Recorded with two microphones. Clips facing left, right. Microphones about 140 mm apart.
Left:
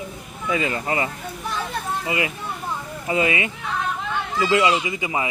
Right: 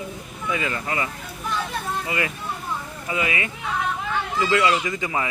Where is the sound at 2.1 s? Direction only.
20° left (ahead or behind).